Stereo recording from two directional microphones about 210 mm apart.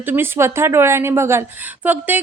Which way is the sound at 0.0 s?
10° right (ahead or behind).